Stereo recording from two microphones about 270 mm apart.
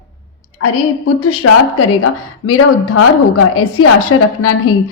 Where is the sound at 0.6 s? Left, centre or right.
Left.